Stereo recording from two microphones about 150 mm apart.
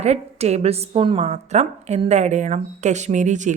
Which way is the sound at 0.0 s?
45° right (ahead or behind).